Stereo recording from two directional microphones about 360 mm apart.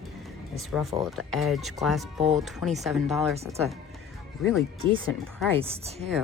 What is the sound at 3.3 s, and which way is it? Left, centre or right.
Speech, centre.